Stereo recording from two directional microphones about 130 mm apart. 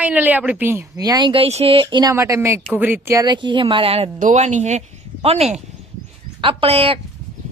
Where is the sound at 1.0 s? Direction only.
30° right (ahead or behind).